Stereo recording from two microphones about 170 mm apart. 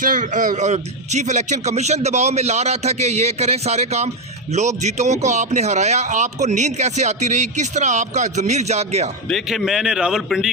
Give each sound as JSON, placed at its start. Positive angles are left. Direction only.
{"t": 0.0, "sound": "a man's voice", "side_deg": -50}
{"t": 9.3, "sound": "a man's voice", "side_deg": 0}